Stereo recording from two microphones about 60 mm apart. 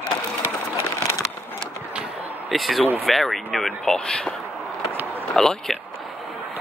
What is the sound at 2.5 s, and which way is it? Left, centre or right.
Speech, centre.